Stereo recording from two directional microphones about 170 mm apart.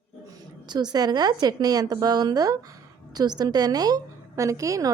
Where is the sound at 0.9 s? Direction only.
25° right (ahead or behind).